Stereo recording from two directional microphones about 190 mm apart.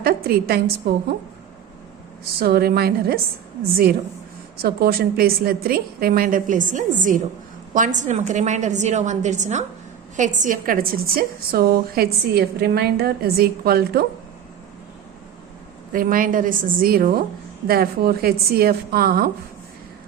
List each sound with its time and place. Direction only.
0.0 s a sound: 55° right (ahead or behind)
2.4 s a woman's voice: 55° right (ahead or behind)
4.5 s a woman's voice: 55° right (ahead or behind)
15.9 s a woman's voice: 45° right (ahead or behind)